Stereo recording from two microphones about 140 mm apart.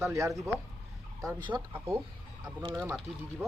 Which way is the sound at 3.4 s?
15° right (ahead or behind).